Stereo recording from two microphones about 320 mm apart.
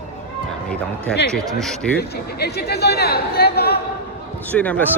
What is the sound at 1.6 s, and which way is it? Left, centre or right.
Speech, centre.